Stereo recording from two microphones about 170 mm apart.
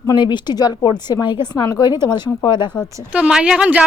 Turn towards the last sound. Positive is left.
turn(degrees=-5)  # may be behind; listen again after turning